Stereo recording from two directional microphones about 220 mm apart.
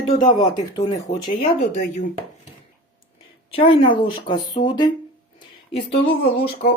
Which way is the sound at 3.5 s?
25° left (ahead or behind).